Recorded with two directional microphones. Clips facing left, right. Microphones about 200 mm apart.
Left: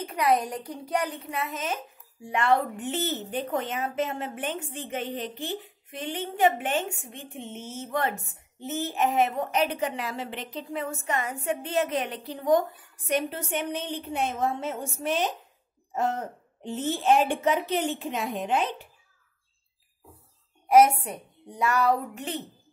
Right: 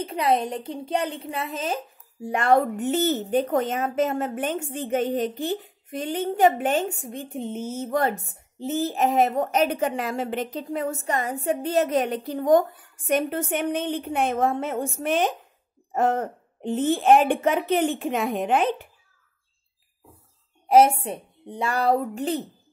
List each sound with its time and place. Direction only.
0.0 s a woman's voice: 25° right (ahead or behind)
2.2 s a woman's voice: 45° right (ahead or behind)
20.6 s a woman's voice: 30° right (ahead or behind)